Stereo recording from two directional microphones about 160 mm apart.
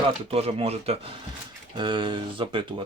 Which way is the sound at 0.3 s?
40° right (ahead or behind).